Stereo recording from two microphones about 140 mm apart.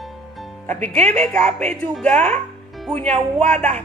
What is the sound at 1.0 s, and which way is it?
Speech, 55° right (ahead or behind).